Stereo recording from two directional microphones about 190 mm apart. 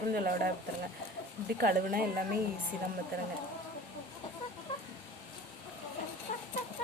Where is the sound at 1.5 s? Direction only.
50° right (ahead or behind).